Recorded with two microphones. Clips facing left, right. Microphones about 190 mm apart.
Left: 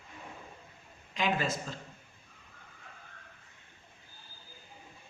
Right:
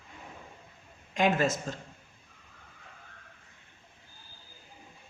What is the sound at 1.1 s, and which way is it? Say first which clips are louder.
Speech: right 5 dB; 45° right (ahead or behind).